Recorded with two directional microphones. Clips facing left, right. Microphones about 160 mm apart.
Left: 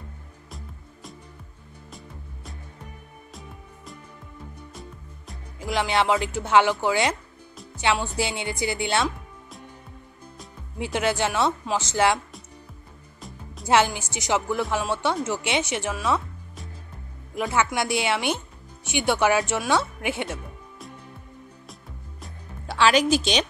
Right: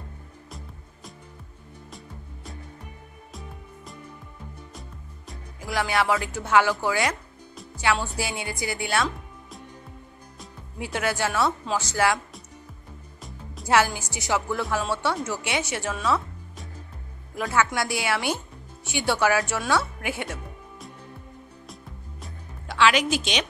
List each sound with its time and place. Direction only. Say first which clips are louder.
1.9 s music: left 1 dB; centre (ahead or behind)
5.7 s speech: left 2 dB; 25° left (ahead or behind)
10.8 s speech: left 2 dB; 25° left (ahead or behind)
13.7 s speech: left 1 dB; 20° left (ahead or behind)
17.4 s a woman's voice: left 1 dB; 20° left (ahead or behind)
22.7 s a woman's voice: left 2 dB; 35° left (ahead or behind)